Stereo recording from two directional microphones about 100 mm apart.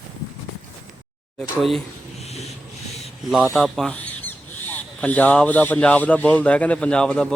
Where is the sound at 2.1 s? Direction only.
90° left.